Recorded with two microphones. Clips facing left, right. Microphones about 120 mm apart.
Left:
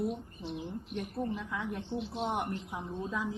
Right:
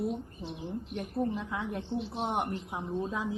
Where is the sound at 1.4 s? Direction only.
25° right (ahead or behind).